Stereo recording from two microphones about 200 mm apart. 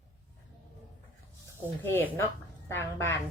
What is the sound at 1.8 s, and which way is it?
Speech, 10° left (ahead or behind).